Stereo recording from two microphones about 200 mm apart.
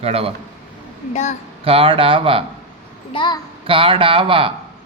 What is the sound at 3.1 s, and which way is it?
Speech, 20° left (ahead or behind).